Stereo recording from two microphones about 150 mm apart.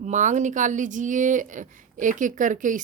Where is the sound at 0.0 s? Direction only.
55° right (ahead or behind).